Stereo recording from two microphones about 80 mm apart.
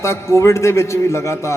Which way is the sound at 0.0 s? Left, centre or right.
Left.